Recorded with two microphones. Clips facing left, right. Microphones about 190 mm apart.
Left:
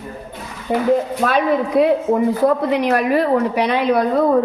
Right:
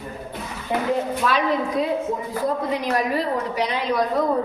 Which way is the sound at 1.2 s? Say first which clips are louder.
Left 5 dB; 60° left (ahead or behind).